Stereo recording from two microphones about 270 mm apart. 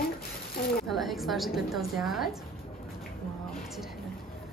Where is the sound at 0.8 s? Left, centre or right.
Centre.